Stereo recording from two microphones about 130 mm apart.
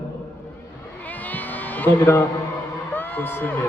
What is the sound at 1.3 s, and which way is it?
Music, 15° left (ahead or behind).